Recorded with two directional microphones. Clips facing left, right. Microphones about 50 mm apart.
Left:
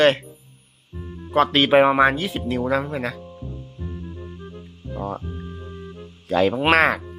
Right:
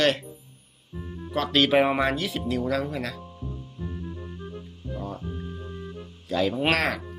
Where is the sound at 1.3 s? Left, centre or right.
Left.